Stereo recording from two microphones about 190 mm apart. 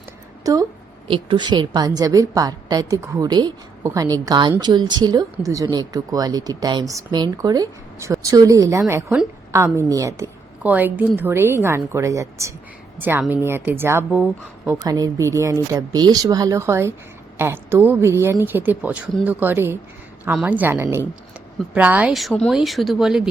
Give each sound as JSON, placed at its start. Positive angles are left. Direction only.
{"t": 0.4, "sound": "a woman's voice", "side_deg": -20}
{"t": 14.8, "sound": "a woman's voice", "side_deg": -20}